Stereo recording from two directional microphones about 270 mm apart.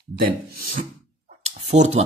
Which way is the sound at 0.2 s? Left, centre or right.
Right.